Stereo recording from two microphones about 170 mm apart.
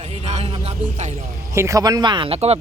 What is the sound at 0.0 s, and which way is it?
Music, 40° right (ahead or behind).